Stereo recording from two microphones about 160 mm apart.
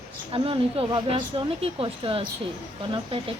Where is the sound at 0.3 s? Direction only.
35° right (ahead or behind).